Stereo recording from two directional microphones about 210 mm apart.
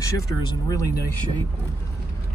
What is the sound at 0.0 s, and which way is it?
Speech, 15° left (ahead or behind).